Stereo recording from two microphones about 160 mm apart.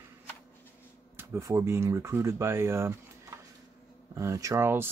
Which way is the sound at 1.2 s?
20° right (ahead or behind).